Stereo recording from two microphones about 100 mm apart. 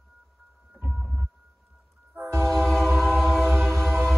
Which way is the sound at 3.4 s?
20° right (ahead or behind).